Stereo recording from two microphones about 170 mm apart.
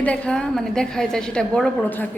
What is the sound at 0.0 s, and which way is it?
A woman's voice, 5° left (ahead or behind).